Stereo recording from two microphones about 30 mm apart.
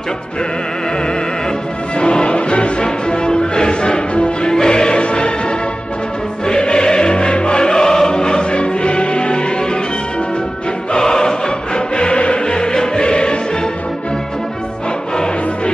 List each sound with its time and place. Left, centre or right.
2.0 s music: left
6.4 s music: left
10.9 s music: left
12.5 s music: left